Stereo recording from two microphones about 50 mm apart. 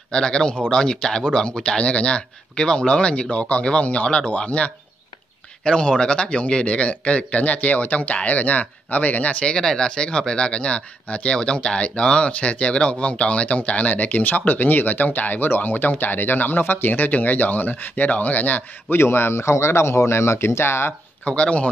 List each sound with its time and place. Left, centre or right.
0.1 s a man's voice: centre
9.5 s speech: centre; by 18.9 s left
18.9 s speech: left
21.2 s a man's voice: left